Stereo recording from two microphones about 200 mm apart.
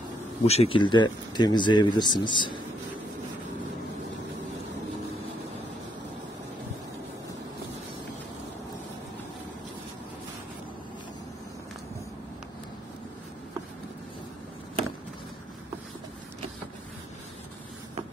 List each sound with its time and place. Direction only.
0.5 s speech: 30° left (ahead or behind)